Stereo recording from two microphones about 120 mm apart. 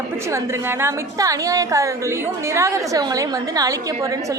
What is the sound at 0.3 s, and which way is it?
A woman's voice, 25° right (ahead or behind).